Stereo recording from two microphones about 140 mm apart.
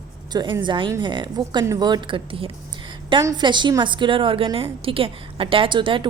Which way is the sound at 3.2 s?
30° right (ahead or behind).